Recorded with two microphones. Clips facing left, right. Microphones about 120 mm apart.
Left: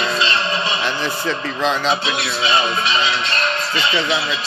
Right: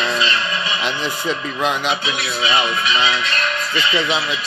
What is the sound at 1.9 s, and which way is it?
Speech, 30° left (ahead or behind).